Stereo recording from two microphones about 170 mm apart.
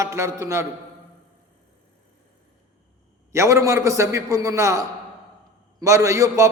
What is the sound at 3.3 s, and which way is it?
A man's voice, 15° right (ahead or behind).